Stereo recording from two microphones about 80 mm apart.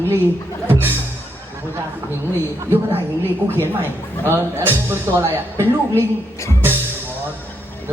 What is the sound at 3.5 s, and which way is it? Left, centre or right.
Speech, right.